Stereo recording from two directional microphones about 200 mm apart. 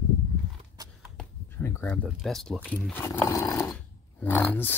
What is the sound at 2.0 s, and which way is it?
Speech, centre (ahead or behind).